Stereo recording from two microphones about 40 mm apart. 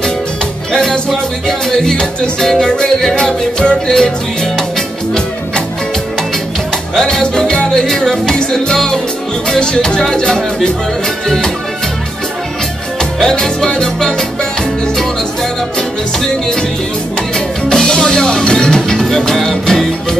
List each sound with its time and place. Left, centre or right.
0.7 s music: centre
7.0 s music: centre
13.2 s music: centre
17.6 s music: centre